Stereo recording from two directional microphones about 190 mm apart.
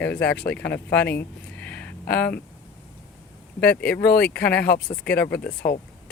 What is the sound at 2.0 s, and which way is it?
Speech, 55° left (ahead or behind).